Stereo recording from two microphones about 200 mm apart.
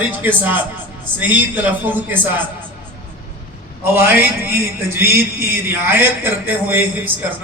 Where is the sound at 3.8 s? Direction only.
10° right (ahead or behind).